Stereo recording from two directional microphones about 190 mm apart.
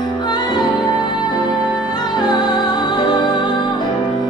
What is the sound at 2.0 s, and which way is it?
Music, 20° left (ahead or behind).